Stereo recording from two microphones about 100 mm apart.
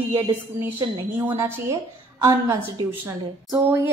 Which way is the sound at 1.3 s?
30° right (ahead or behind).